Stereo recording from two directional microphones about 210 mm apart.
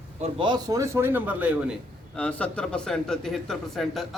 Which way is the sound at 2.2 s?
5° left (ahead or behind).